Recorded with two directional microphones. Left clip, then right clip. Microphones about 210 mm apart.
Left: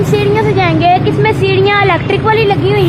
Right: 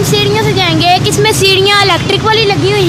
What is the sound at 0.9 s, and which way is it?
Vehicle, 25° right (ahead or behind).